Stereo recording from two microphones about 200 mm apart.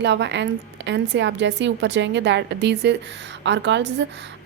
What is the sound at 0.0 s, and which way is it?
A woman's voice, 60° right (ahead or behind).